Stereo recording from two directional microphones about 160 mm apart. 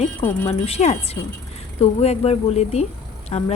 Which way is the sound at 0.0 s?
35° left (ahead or behind).